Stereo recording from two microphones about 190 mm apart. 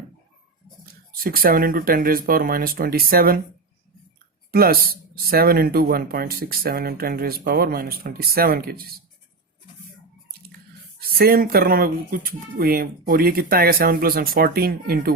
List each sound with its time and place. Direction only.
1.1 s speech: 50° right (ahead or behind)
4.5 s speech: 50° right (ahead or behind)
11.2 s speech: 50° right (ahead or behind)